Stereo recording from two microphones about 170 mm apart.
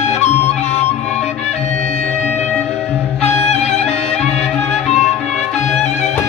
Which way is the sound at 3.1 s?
40° left (ahead or behind).